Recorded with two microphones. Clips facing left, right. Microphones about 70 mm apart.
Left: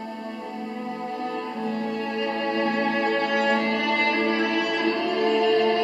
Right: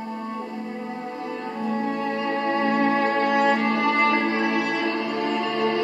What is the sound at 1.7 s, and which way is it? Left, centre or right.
Music, right.